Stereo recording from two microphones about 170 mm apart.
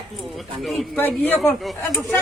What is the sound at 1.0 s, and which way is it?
Speech, 10° left (ahead or behind).